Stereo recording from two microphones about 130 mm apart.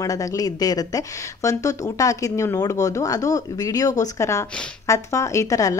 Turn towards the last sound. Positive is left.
turn(degrees=25)  # may be behind; listen again after turning